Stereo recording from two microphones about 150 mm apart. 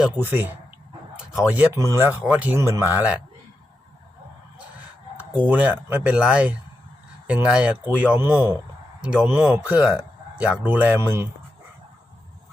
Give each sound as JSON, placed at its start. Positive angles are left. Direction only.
{"t": 0.0, "sound": "a man's voice", "side_deg": -15}
{"t": 5.5, "sound": "speech", "side_deg": -10}